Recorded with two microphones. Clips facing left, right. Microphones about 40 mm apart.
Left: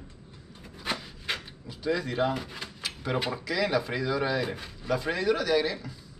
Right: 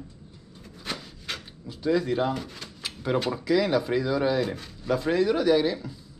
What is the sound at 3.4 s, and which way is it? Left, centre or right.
Speech, centre.